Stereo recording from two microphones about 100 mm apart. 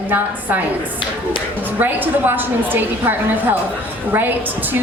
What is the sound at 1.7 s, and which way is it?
A woman's voice, 20° right (ahead or behind).